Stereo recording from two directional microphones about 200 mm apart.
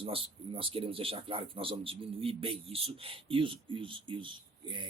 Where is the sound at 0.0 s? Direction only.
25° right (ahead or behind).